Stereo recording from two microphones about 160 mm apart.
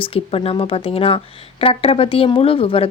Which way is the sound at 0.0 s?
35° left (ahead or behind).